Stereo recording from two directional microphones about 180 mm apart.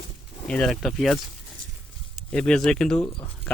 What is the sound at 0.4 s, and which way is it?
Speech, 5° left (ahead or behind).